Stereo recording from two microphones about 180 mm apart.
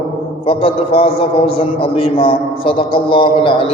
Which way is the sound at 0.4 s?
30° left (ahead or behind).